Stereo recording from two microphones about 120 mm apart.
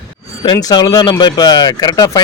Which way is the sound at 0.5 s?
30° left (ahead or behind).